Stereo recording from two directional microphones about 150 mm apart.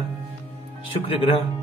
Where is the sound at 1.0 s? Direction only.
35° left (ahead or behind).